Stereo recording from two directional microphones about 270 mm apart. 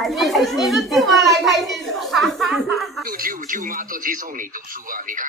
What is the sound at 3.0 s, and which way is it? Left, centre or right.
Speech, right.